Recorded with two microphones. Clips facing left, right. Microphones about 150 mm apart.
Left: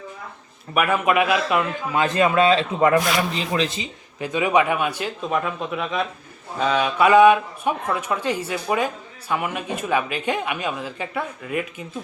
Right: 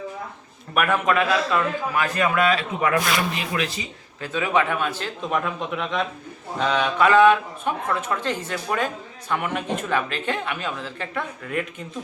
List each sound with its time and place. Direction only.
0.7 s speech: 5° left (ahead or behind); by 3.8 s 30° left (ahead or behind)
4.2 s speech: 15° left (ahead or behind)